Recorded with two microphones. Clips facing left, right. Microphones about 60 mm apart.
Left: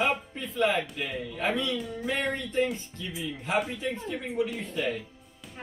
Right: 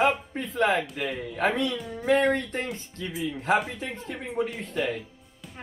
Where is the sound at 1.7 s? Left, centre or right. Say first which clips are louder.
Even; centre.